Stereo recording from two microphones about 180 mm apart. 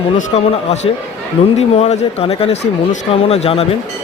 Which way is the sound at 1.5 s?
35° left (ahead or behind).